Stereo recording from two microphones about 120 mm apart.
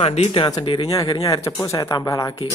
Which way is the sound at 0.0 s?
55° left (ahead or behind).